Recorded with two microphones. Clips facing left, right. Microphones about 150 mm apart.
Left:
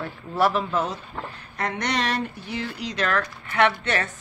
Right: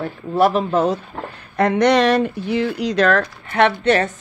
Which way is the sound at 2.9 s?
35° right (ahead or behind).